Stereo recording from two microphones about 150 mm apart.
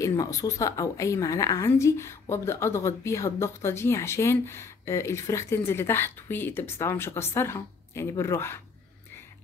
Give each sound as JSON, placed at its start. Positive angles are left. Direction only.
{"t": 0.0, "sound": "a woman's voice", "side_deg": 20}